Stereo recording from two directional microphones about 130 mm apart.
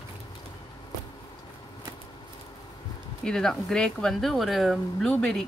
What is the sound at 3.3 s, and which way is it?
Speech, 5° left (ahead or behind).